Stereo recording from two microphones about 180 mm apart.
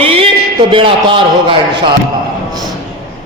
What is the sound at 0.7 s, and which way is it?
Speech, 30° right (ahead or behind).